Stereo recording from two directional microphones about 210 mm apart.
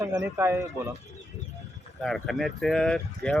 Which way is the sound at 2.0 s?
Centre (ahead or behind).